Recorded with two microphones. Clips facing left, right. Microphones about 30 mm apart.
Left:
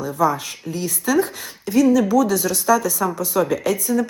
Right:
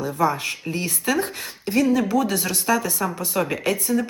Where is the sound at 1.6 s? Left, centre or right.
Right.